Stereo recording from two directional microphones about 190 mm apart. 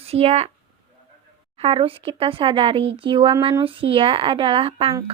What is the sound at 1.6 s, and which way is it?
Speech, 30° right (ahead or behind).